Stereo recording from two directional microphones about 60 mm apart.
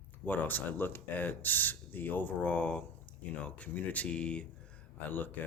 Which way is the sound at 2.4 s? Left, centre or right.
Centre.